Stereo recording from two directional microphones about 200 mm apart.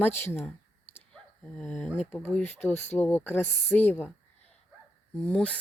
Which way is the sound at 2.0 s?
10° left (ahead or behind).